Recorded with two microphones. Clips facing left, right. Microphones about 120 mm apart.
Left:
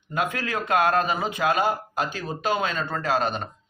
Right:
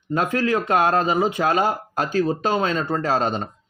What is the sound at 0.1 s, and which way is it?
Speech, 35° right (ahead or behind).